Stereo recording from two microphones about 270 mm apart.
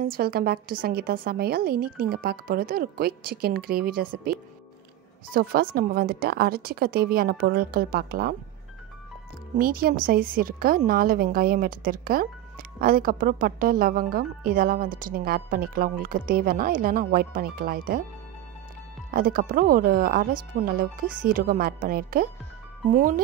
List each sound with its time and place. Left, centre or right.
0.0 s a woman's voice: right
9.6 s a woman's voice: right
19.0 s a woman's voice: right